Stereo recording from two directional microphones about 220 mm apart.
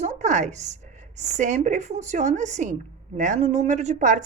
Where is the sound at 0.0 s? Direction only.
35° right (ahead or behind).